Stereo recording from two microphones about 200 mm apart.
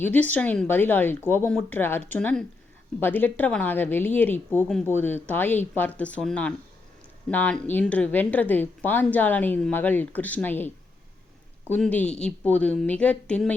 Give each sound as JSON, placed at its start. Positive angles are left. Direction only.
{"t": 0.0, "sound": "a woman's voice", "side_deg": 10}
{"t": 11.7, "sound": "a woman's voice", "side_deg": 10}